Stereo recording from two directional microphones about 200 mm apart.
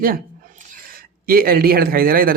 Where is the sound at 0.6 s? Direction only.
45° right (ahead or behind).